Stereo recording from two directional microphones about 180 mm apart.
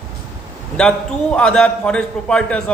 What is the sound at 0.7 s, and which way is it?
A man's voice, 5° left (ahead or behind).